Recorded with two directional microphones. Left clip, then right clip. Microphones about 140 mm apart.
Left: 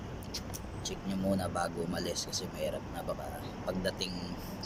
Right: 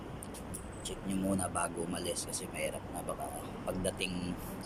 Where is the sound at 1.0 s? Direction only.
15° right (ahead or behind).